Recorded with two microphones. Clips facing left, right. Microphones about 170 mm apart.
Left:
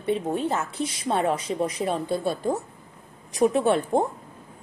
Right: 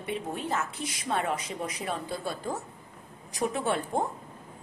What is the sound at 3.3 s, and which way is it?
Speech, 25° left (ahead or behind).